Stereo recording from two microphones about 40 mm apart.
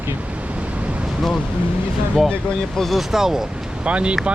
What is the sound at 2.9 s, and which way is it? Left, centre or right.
Speech, centre.